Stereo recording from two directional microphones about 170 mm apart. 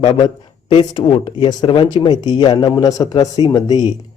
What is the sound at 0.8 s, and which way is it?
A man's voice, 30° left (ahead or behind).